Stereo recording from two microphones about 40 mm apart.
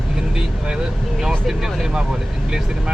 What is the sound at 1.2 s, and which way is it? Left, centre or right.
Speech, centre.